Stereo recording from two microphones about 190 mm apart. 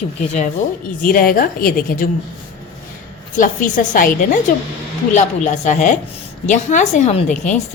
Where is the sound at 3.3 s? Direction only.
40° left (ahead or behind).